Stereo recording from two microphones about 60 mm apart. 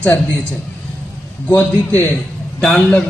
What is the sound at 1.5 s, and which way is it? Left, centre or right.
Speech, left.